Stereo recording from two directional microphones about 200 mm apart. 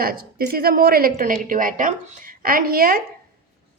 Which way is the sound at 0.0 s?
45° right (ahead or behind).